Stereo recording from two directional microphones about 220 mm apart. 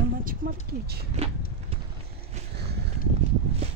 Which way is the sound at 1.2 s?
30° right (ahead or behind).